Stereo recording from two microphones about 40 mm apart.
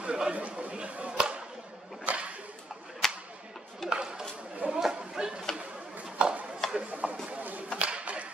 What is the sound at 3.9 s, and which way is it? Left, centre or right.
Chatter, right.